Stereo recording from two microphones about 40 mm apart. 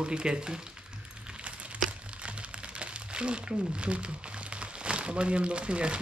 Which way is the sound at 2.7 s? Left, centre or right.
Right.